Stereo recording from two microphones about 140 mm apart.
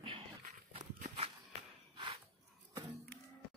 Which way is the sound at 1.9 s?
35° right (ahead or behind).